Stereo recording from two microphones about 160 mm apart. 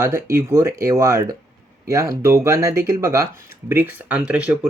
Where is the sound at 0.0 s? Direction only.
15° right (ahead or behind).